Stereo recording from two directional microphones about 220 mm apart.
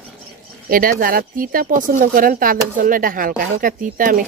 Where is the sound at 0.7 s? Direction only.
40° right (ahead or behind).